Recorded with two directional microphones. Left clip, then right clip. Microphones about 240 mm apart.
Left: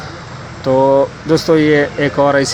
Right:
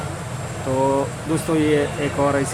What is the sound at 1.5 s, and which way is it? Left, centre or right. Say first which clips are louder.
Speech: left 6 dB; left.